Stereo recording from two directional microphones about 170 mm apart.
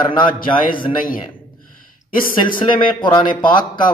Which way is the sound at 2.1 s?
55° left (ahead or behind).